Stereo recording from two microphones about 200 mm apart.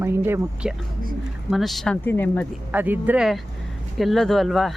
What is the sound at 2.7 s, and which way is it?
A woman's voice, 10° right (ahead or behind).